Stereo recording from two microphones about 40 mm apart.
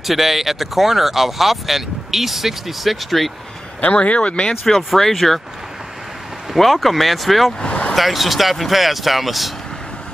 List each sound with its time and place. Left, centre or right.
0.0 s speech: centre
3.8 s speech: left
4.6 s speech: centre
6.5 s speech: centre
7.6 s vehicle: left
7.9 s speech: centre